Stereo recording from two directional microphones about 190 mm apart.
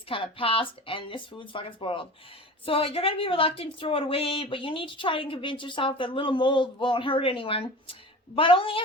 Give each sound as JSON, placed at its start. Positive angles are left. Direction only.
{"t": 0.1, "sound": "a woman's voice", "side_deg": 25}